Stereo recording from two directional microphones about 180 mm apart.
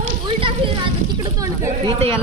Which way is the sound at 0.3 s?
30° right (ahead or behind).